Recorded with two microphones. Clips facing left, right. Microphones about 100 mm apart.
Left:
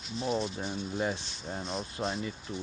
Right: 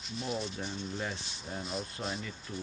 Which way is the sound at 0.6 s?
15° left (ahead or behind).